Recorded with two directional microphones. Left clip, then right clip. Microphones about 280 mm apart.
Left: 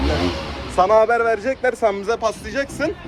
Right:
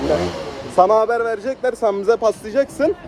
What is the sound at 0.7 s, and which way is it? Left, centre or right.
Speech, right.